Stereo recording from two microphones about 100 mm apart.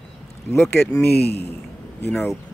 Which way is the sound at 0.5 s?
25° left (ahead or behind).